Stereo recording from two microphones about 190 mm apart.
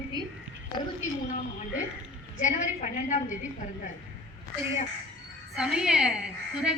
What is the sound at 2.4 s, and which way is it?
A woman's voice, 40° left (ahead or behind).